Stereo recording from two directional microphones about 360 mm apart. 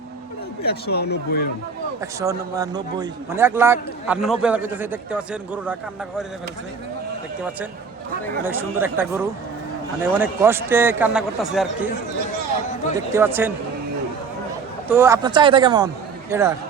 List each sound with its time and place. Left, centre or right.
0.6 s speech: left
2.0 s a man's voice: centre
8.4 s a man's voice: centre
13.1 s a man's voice: centre
14.8 s a man's voice: centre